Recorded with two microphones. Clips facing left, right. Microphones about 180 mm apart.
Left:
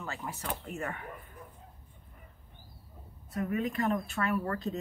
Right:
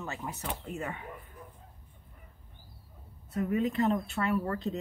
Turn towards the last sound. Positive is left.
turn(degrees=-15)  # may be behind; listen again after turning